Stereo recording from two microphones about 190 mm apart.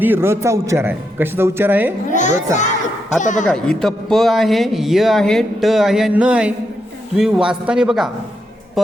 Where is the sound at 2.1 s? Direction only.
40° left (ahead or behind).